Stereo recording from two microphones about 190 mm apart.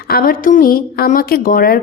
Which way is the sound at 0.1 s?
50° left (ahead or behind).